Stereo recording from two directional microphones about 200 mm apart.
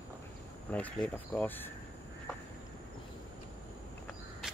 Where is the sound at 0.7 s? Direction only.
5° left (ahead or behind).